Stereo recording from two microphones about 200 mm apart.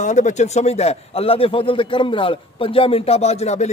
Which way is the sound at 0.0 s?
35° left (ahead or behind).